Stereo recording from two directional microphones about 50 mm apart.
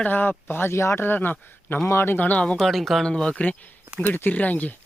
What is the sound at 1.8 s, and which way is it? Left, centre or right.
Speech, left.